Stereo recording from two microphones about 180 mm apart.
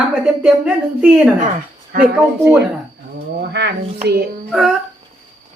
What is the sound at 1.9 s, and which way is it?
Speech, 55° right (ahead or behind).